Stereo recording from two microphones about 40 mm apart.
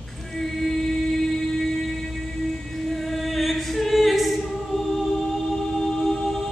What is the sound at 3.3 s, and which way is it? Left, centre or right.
Choir, centre.